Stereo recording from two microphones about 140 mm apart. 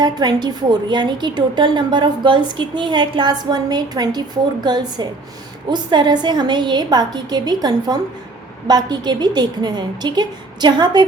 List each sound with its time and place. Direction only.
0.0 s a woman's voice: 30° right (ahead or behind)